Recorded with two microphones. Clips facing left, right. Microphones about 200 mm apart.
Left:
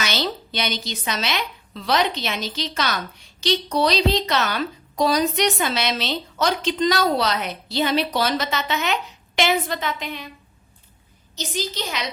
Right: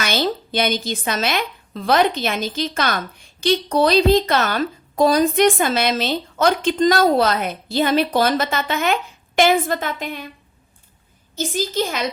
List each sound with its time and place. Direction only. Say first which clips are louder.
0.0 s a woman's voice: right 4 dB; 50° right (ahead or behind)
11.3 s a woman's voice: right 7 dB; 50° right (ahead or behind)